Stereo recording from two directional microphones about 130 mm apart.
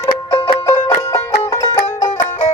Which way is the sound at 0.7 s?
20° left (ahead or behind).